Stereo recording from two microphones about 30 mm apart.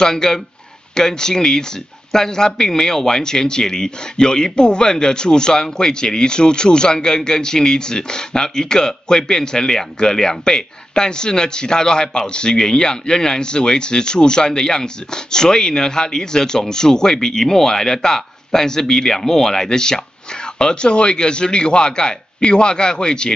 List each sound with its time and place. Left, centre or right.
0.0 s speech: centre